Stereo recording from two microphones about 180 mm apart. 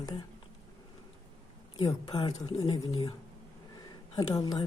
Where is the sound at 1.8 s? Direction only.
25° left (ahead or behind).